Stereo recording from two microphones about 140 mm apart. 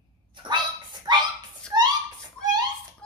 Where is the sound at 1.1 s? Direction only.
30° right (ahead or behind).